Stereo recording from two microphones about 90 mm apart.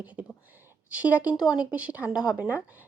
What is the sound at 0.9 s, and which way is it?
Speech, 15° right (ahead or behind).